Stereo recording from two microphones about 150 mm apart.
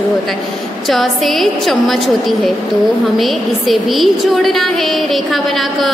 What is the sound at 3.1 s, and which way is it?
A woman's voice, centre (ahead or behind).